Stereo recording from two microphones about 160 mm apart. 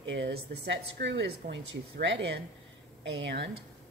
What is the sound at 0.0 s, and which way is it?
A woman's voice, 90° right.